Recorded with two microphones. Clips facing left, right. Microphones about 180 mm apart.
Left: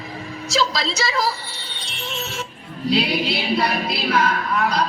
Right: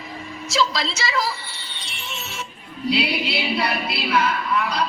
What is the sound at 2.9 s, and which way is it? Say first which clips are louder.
Speech: left 2 dB; 40° left (ahead or behind).